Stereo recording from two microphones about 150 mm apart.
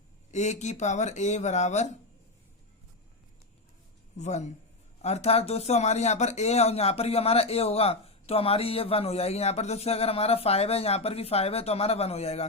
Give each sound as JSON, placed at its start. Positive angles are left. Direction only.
{"t": 0.3, "sound": "speech", "side_deg": 50}
{"t": 4.2, "sound": "speech", "side_deg": 50}